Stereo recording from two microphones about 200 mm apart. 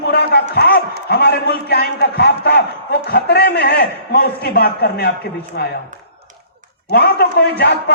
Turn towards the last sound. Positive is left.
turn(degrees=55)  # may be behind; listen again after turning